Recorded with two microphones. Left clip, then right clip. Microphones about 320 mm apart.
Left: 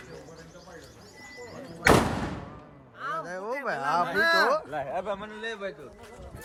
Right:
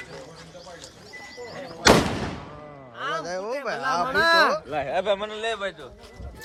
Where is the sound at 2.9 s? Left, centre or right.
Right.